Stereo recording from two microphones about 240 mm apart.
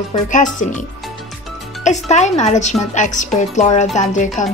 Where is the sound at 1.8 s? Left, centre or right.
Left.